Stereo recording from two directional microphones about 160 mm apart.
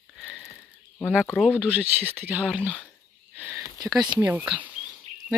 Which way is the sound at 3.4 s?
10° right (ahead or behind).